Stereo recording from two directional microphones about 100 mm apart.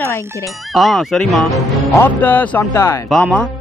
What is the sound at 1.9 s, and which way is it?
Speech, 20° left (ahead or behind).